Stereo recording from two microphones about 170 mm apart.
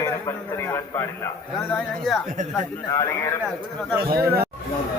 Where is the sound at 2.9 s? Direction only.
20° left (ahead or behind).